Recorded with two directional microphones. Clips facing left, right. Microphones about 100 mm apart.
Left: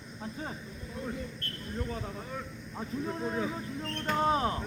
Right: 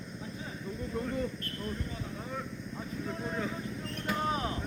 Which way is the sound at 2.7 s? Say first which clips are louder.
Left 4 dB; 25° left (ahead or behind).